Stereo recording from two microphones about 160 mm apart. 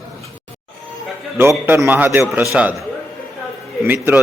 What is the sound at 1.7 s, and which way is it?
A man's voice, 15° right (ahead or behind).